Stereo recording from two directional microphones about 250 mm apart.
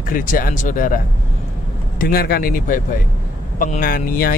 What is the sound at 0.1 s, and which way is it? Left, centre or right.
Speech, left.